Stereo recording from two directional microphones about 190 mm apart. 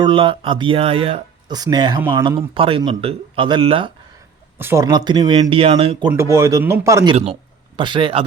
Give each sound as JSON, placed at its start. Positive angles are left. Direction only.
{"t": 0.0, "sound": "speech", "side_deg": -25}
{"t": 4.5, "sound": "speech", "side_deg": -10}
{"t": 6.1, "sound": "speech", "side_deg": -15}